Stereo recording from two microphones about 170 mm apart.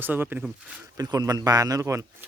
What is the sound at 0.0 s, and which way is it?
Speech, 10° right (ahead or behind).